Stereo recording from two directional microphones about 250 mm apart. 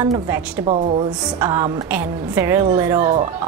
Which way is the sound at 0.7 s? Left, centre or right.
Right.